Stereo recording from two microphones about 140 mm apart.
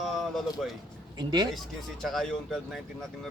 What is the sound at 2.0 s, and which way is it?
Speech, centre (ahead or behind).